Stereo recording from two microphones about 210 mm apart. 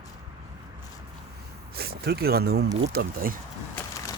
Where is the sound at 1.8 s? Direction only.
50° right (ahead or behind).